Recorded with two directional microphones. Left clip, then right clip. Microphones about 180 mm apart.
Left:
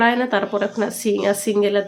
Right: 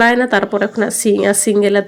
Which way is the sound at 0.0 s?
35° right (ahead or behind).